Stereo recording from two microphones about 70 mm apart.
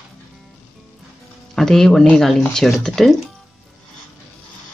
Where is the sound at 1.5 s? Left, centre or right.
Centre.